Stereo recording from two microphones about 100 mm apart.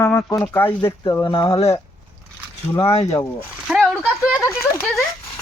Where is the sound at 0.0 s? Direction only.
30° left (ahead or behind).